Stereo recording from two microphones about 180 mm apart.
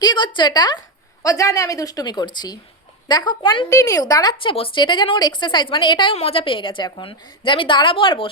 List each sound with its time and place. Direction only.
0.0 s a woman's voice: 25° left (ahead or behind)